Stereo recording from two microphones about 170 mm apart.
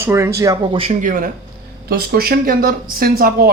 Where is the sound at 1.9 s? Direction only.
65° right (ahead or behind).